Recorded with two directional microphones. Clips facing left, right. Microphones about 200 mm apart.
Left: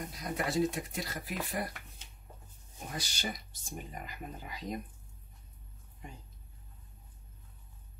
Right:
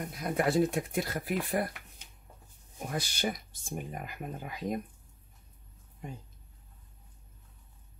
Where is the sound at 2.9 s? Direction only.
55° right (ahead or behind).